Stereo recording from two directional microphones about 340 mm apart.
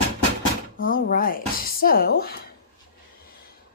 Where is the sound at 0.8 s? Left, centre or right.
Left.